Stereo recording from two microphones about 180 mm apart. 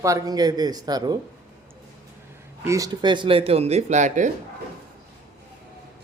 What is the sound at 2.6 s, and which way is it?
Speech, 20° right (ahead or behind).